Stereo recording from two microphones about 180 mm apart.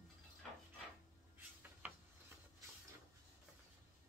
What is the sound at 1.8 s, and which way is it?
Gears, 10° right (ahead or behind).